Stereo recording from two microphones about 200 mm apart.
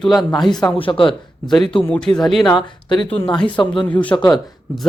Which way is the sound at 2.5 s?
25° left (ahead or behind).